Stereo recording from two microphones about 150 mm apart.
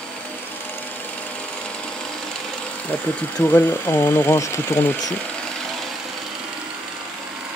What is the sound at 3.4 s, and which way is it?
Speech, 15° left (ahead or behind).